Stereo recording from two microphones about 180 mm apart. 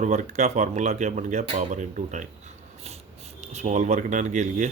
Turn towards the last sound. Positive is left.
turn(degrees=-40)  # may be behind; listen again after turning